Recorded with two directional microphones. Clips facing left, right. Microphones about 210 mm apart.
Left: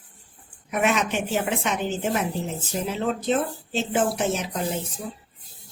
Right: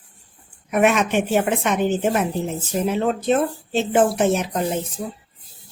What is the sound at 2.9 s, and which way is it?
Speech, 55° right (ahead or behind).